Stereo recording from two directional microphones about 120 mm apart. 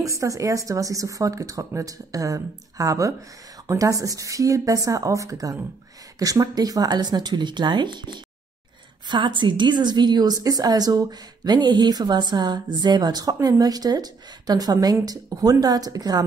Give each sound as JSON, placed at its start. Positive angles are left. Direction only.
{"t": 0.0, "sound": "a woman's voice", "side_deg": -25}